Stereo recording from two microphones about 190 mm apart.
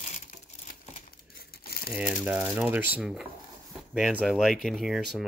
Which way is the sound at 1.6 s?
50° left (ahead or behind).